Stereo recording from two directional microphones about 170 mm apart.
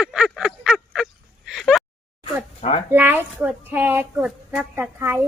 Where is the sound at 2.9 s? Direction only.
10° right (ahead or behind).